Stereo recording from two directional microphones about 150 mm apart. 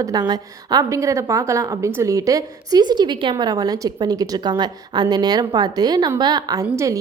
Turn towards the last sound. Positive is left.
turn(degrees=-20)  # may be behind; listen again after turning